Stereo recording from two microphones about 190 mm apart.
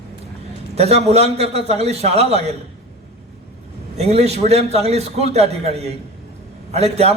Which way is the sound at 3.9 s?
35° right (ahead or behind).